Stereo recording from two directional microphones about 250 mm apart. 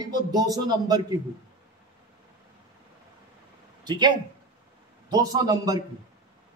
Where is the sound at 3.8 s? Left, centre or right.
Centre.